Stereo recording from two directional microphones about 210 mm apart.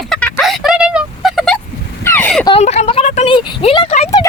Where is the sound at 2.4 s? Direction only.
25° left (ahead or behind).